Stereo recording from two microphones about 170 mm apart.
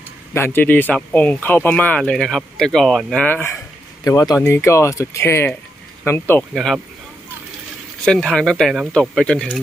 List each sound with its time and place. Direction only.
0.3 s speech: 15° left (ahead or behind)
6.5 s speech: centre (ahead or behind)
8.0 s speech: 5° left (ahead or behind)